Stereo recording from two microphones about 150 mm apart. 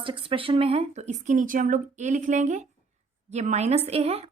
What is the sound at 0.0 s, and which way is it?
A woman's voice, 35° right (ahead or behind).